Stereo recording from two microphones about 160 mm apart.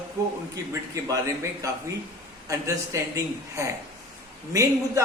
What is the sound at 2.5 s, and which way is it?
Speech, 20° right (ahead or behind).